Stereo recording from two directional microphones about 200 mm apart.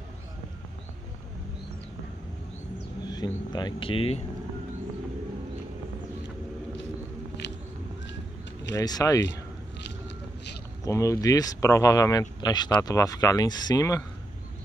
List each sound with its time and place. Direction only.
3.1 s speech: 20° left (ahead or behind)
8.7 s speech: 15° left (ahead or behind)
10.9 s speech: 15° left (ahead or behind)